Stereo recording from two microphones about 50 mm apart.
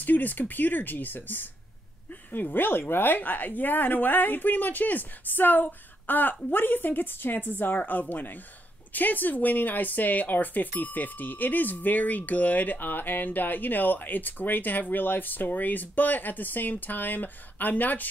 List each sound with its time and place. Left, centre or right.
0.0 s speech: left